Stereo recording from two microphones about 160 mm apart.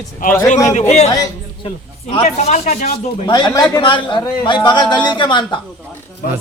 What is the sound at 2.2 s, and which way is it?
Speech, 45° left (ahead or behind).